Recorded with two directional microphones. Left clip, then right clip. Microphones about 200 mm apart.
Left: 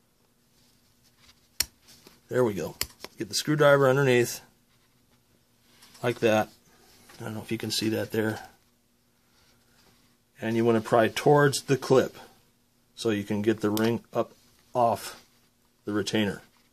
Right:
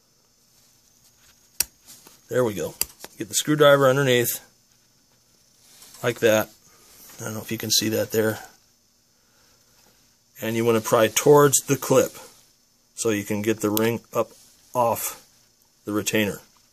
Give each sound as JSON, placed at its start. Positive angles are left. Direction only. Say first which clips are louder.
{"t": 2.2, "sound": "speech", "louder": "right 3 dB", "side_deg": -35}
{"t": 5.9, "sound": "speech", "louder": "right 4 dB", "side_deg": -35}
{"t": 10.3, "sound": "speech", "louder": "right 3 dB", "side_deg": -45}